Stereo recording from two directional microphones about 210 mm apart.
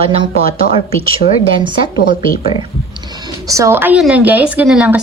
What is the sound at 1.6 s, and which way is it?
Speech, 25° right (ahead or behind).